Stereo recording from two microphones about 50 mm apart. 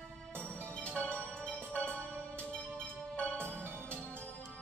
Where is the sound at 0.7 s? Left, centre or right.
Left.